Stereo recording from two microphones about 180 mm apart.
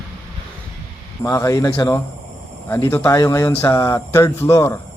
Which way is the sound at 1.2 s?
15° left (ahead or behind).